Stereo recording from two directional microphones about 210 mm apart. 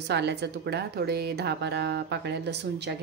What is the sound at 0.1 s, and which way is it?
A woman's voice, 55° right (ahead or behind).